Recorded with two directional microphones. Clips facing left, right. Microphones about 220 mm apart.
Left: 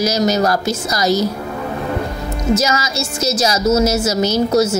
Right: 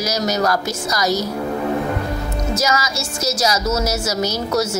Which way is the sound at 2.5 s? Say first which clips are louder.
Left 4 dB; 25° left (ahead or behind).